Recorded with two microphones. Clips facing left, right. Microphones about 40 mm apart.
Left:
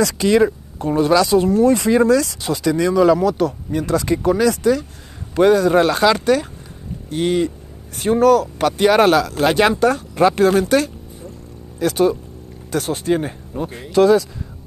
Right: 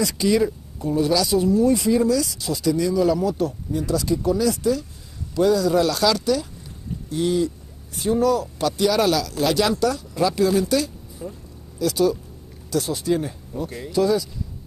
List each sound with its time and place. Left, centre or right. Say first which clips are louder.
0.0 s speech: left 5 dB; left
5.3 s speech: left 5 dB; left
13.9 s speech: left 7 dB; left